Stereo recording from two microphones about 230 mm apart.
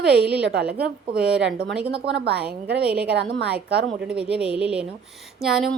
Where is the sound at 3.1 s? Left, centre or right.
Right.